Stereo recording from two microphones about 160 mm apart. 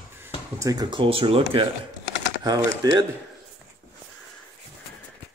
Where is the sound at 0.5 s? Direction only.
20° right (ahead or behind).